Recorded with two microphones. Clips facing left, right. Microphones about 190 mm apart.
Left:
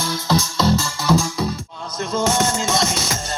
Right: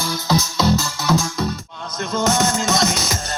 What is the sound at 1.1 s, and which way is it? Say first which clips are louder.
Music: left 1 dB; 30° left (ahead or behind).